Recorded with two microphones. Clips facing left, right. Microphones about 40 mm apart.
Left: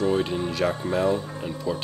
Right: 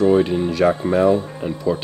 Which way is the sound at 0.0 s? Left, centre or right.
Centre.